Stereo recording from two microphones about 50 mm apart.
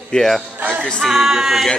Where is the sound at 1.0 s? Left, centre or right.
Centre.